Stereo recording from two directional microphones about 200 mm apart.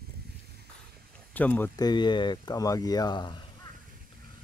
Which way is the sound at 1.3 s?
10° left (ahead or behind).